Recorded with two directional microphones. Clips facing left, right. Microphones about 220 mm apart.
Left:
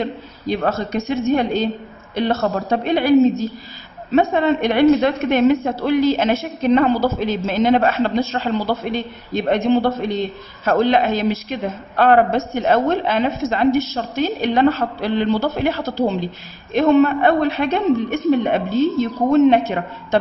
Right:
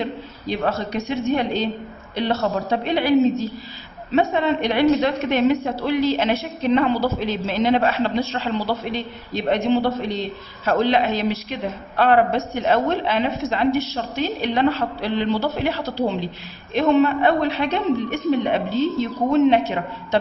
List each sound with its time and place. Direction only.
0.5 s a woman's voice: 45° left (ahead or behind)